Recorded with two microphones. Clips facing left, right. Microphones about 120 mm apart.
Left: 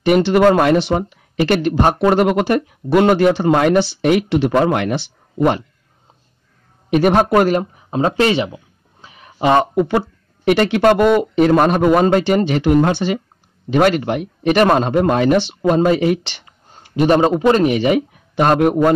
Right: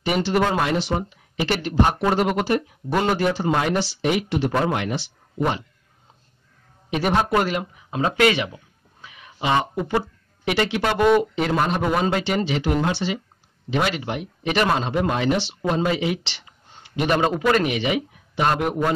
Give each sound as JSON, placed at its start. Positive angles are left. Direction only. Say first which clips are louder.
{"t": 0.0, "sound": "speech", "louder": "left 9 dB", "side_deg": 65}
{"t": 6.9, "sound": "speech", "louder": "left 7 dB", "side_deg": 55}
{"t": 9.0, "sound": "a sound", "louder": "left 2 dB", "side_deg": 35}
{"t": 9.4, "sound": "a man's voice", "louder": "left 8 dB", "side_deg": 50}